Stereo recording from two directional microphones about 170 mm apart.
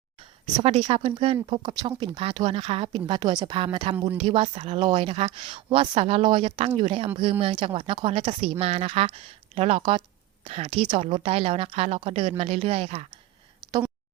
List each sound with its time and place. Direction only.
0.5 s a woman's voice: 30° right (ahead or behind)